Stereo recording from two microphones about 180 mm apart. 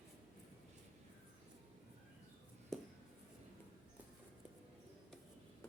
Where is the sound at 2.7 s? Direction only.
Centre (ahead or behind).